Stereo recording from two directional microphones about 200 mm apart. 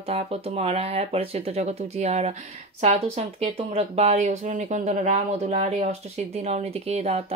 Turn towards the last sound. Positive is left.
turn(degrees=-30)  # may be behind; listen again after turning